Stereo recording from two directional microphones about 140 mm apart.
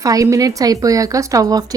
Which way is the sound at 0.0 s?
25° right (ahead or behind).